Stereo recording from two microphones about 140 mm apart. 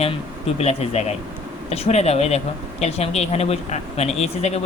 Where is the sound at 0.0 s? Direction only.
45° left (ahead or behind).